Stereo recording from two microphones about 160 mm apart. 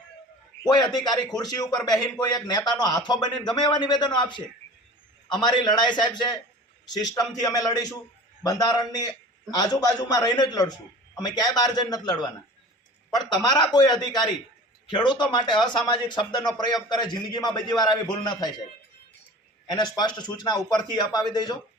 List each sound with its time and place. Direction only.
0.6 s a man's voice: 25° left (ahead or behind)
19.7 s speech: 25° left (ahead or behind)